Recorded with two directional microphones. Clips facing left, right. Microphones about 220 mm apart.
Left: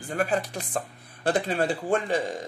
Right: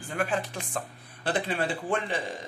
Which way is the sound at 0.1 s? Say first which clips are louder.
Left 3 dB; 40° left (ahead or behind).